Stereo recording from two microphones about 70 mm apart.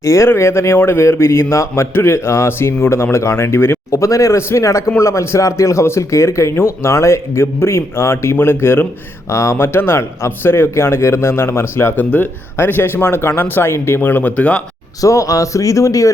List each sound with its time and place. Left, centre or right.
0.0 s a man's voice: left; by 14.6 s centre
15.0 s speech: left